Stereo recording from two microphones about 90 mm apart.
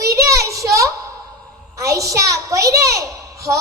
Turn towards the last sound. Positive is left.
turn(degrees=-40)  # may be behind; listen again after turning